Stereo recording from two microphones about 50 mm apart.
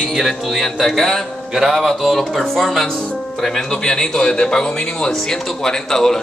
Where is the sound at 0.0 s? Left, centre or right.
Centre.